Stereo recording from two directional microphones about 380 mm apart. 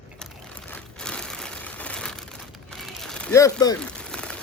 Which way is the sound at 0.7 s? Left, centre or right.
Centre.